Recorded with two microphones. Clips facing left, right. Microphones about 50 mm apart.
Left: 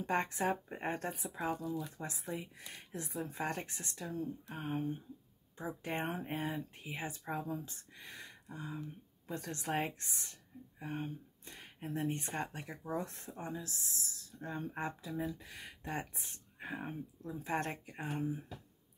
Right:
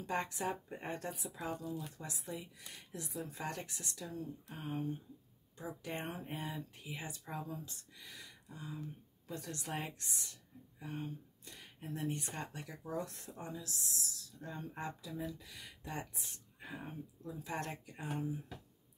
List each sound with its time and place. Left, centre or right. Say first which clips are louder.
0.0 s speech: left 4 dB; left